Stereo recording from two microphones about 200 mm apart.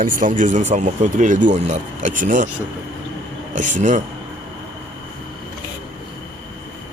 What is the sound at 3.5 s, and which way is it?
Speech, 40° right (ahead or behind).